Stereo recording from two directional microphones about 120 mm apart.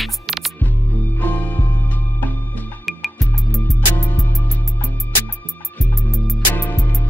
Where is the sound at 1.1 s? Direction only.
15° left (ahead or behind).